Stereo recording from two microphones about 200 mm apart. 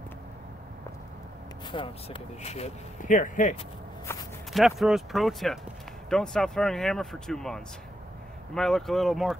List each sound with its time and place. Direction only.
1.7 s speech: 25° left (ahead or behind)
4.1 s speech: 15° left (ahead or behind)
4.5 s speech: centre (ahead or behind)